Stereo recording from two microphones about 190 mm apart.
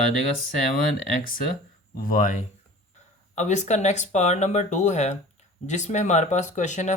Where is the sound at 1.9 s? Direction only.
45° left (ahead or behind).